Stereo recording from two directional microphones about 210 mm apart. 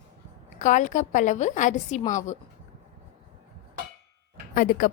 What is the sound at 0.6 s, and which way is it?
A woman's voice, 35° left (ahead or behind).